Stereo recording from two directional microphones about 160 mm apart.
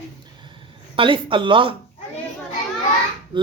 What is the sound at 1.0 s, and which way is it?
Speech, 30° right (ahead or behind).